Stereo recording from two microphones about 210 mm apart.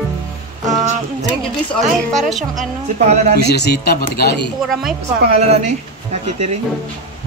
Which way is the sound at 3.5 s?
50° left (ahead or behind).